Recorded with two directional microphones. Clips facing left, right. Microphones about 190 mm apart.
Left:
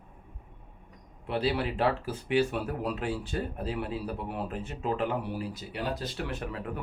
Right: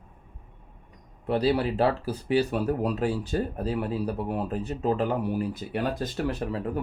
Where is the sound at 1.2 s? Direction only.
40° right (ahead or behind).